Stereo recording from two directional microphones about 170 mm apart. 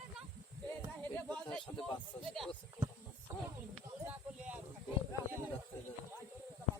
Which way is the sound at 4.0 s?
10° right (ahead or behind).